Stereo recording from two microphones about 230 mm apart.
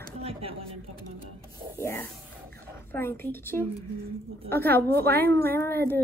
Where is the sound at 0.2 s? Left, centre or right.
Right.